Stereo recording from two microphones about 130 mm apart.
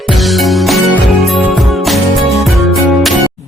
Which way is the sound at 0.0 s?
Centre (ahead or behind).